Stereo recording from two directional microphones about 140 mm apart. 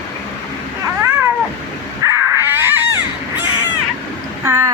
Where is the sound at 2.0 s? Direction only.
20° right (ahead or behind).